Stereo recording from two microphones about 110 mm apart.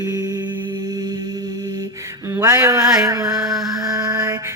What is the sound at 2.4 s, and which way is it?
Mantra, 30° right (ahead or behind).